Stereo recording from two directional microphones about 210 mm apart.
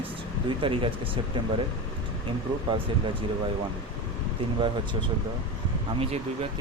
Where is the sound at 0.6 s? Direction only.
25° right (ahead or behind).